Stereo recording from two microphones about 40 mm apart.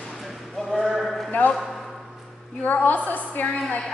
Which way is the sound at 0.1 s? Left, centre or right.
Centre.